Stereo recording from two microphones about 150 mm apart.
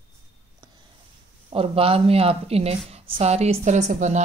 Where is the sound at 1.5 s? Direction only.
40° right (ahead or behind).